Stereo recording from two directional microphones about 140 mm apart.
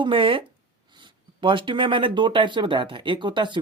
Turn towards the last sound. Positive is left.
turn(degrees=-35)  # may be behind; listen again after turning